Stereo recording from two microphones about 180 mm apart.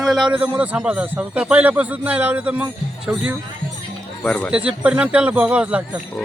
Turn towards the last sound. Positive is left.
turn(degrees=-5)  # may be behind; listen again after turning